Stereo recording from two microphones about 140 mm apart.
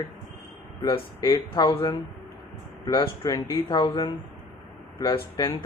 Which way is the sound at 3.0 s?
30° left (ahead or behind).